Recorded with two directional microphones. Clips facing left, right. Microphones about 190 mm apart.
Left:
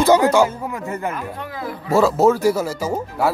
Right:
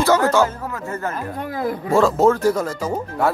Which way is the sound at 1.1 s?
45° right (ahead or behind).